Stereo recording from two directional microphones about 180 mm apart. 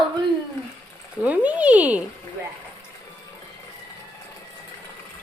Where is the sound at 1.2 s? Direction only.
10° right (ahead or behind).